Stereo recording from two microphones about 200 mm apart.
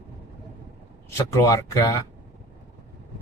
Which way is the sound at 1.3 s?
15° left (ahead or behind).